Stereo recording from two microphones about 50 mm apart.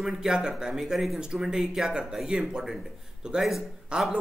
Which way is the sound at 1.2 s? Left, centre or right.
Centre.